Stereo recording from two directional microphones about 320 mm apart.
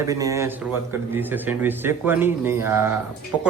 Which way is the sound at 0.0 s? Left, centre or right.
Centre.